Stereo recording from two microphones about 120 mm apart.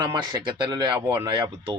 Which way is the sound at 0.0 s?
40° right (ahead or behind).